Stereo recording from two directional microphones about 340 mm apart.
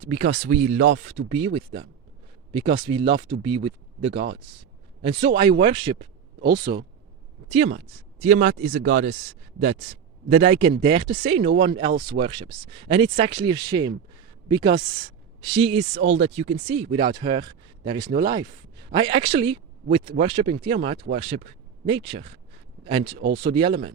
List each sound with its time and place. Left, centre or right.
0.0 s speech: centre
2.5 s speech: centre